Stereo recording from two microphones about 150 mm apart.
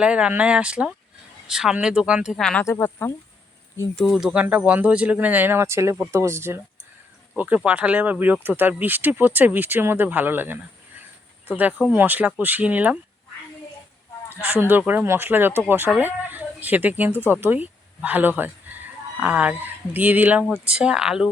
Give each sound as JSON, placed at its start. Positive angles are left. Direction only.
{"t": 0.0, "sound": "speech", "side_deg": -5}
{"t": 2.6, "sound": "speech", "side_deg": 15}
{"t": 3.9, "sound": "speech", "side_deg": 0}
{"t": 14.5, "sound": "speech", "side_deg": -15}